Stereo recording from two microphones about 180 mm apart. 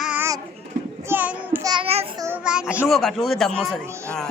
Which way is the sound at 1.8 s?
35° right (ahead or behind).